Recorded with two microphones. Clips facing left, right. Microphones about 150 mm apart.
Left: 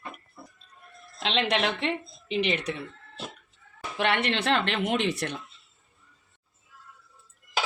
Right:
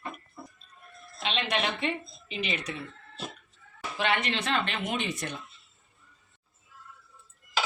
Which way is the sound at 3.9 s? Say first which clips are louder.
Left 3 dB; 65° left (ahead or behind).